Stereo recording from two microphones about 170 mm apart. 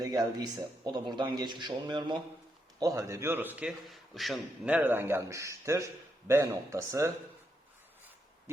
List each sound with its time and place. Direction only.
0.0 s a man's voice: 20° right (ahead or behind)